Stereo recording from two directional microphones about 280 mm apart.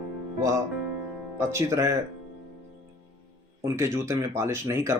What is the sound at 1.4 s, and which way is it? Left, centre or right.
Speech, centre.